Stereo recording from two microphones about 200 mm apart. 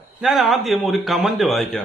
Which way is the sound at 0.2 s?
Centre (ahead or behind).